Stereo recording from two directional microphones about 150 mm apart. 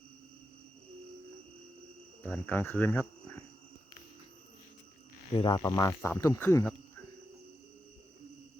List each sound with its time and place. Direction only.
2.2 s speech: 10° left (ahead or behind)
5.3 s cricket: 30° left (ahead or behind)